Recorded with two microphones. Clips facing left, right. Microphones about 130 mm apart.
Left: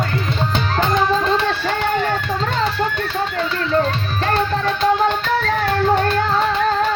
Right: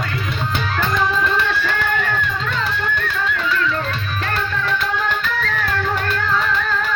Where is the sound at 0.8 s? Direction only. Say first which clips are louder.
Left 3 dB; 25° left (ahead or behind).